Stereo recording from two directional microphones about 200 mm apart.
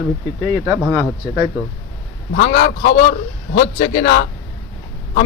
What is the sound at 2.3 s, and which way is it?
A man's voice, 50° left (ahead or behind).